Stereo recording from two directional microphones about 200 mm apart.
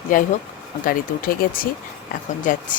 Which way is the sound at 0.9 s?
45° left (ahead or behind).